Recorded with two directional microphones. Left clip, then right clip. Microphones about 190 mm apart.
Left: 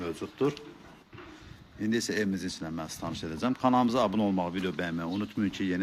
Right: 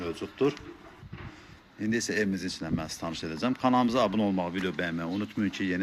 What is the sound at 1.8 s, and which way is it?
Speech, centre (ahead or behind).